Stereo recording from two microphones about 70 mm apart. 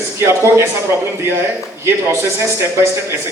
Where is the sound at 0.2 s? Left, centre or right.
Right.